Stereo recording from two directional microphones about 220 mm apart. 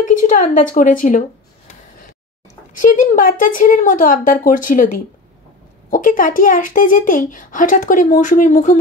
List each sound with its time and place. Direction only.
0.0 s a woman's voice: 35° left (ahead or behind)
2.7 s a woman's voice: 35° left (ahead or behind)